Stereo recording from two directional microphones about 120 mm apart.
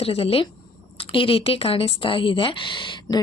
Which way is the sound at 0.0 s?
55° left (ahead or behind).